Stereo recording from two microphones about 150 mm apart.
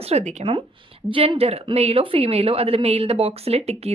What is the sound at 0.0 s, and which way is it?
Speech, 45° right (ahead or behind).